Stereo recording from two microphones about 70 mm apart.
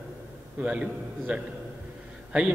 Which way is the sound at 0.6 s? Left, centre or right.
Centre.